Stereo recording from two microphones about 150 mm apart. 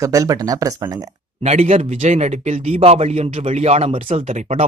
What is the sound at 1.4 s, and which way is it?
Speech, 45° right (ahead or behind).